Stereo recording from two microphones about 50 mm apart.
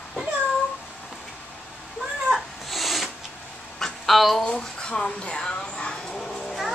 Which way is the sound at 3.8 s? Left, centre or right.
Centre.